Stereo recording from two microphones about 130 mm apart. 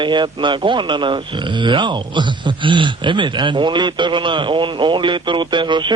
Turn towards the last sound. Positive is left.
turn(degrees=-35)  # may be behind; listen again after turning